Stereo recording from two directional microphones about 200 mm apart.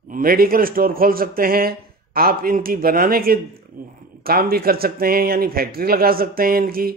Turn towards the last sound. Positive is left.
turn(degrees=-50)  # may be behind; listen again after turning